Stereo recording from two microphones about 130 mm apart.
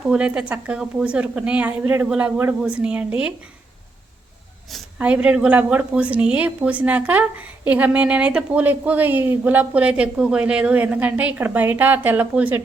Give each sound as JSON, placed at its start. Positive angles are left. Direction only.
{"t": 0.0, "sound": "a woman's voice", "side_deg": -10}
{"t": 4.9, "sound": "a woman's voice", "side_deg": -10}